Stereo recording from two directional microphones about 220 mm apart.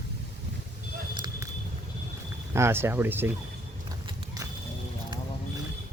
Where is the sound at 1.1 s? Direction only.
20° right (ahead or behind).